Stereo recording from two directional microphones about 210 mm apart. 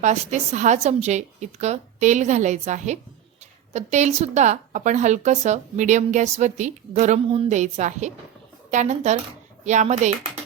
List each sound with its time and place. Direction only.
0.0 s a woman's voice: 35° right (ahead or behind)